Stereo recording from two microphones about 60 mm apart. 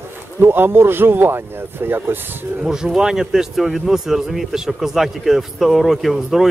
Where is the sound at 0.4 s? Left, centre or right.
Right.